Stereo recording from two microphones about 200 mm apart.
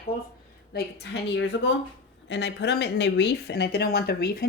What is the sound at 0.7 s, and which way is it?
Speech, 55° left (ahead or behind).